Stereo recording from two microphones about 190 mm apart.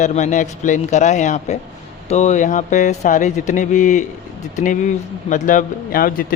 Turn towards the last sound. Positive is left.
turn(degrees=50)  # may be behind; listen again after turning